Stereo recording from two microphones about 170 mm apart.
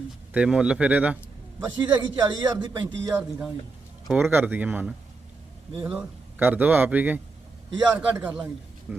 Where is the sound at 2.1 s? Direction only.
25° right (ahead or behind).